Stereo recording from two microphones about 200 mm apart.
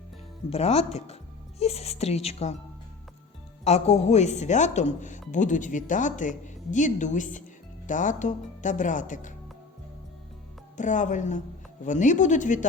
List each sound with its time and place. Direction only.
0.5 s speech: 30° left (ahead or behind)
3.6 s speech: 35° left (ahead or behind)
10.8 s speech: 40° left (ahead or behind)